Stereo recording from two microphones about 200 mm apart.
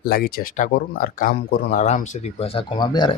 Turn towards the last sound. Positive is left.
turn(degrees=20)  # may be behind; listen again after turning